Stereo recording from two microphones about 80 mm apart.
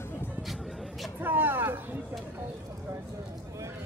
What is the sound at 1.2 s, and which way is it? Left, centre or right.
Vehicle, right.